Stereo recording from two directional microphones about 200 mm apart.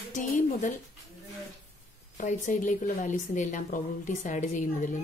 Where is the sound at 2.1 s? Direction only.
40° left (ahead or behind).